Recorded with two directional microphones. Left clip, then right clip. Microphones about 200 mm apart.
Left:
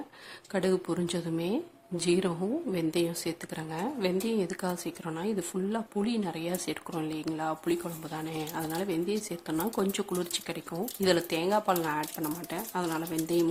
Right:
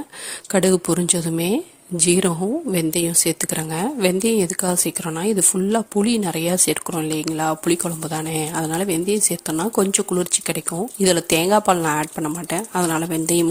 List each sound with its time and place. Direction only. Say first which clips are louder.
0.5 s a woman's voice: right 11 dB; 40° right (ahead or behind)